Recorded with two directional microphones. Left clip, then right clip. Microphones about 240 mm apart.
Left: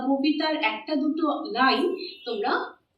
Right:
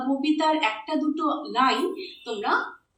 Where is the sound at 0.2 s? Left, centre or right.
Right.